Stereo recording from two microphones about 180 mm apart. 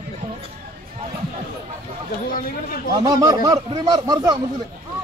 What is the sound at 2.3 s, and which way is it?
Speech, 55° left (ahead or behind).